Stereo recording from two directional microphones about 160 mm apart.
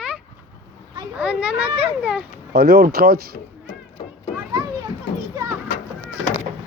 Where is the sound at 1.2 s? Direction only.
5° right (ahead or behind).